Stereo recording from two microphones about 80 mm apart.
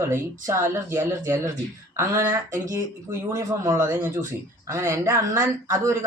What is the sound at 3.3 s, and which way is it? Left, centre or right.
Speech, right.